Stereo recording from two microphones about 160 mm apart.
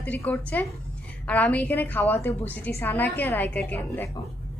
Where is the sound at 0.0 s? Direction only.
10° left (ahead or behind).